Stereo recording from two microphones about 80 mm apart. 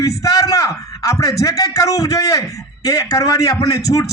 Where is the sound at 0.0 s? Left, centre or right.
Left.